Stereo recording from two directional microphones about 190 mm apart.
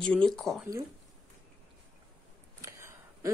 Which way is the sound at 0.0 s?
5° left (ahead or behind).